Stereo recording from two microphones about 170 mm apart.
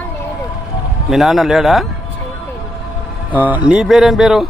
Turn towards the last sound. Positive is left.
turn(degrees=0)  # may be behind; listen again after turning